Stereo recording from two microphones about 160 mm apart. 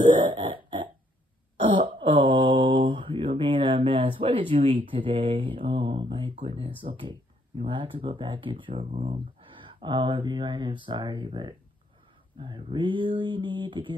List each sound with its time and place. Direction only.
0.3 s a sound: 30° right (ahead or behind)
1.7 s mantra: 30° right (ahead or behind)
6.4 s speech: 35° right (ahead or behind)